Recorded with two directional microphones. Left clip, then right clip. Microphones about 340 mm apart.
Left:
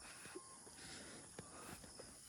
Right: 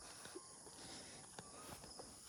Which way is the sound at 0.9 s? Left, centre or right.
Centre.